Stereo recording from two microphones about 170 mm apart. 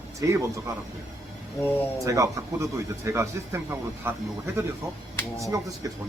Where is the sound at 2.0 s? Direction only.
20° right (ahead or behind).